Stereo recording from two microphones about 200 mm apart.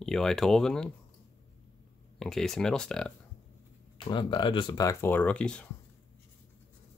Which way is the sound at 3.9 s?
25° left (ahead or behind).